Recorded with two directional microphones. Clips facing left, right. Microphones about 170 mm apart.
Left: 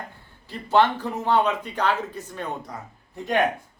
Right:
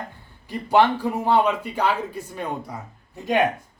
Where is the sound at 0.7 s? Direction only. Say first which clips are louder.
Right 2 dB; 10° right (ahead or behind).